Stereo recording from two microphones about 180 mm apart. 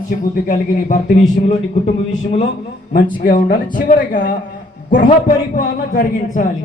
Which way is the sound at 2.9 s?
50° left (ahead or behind).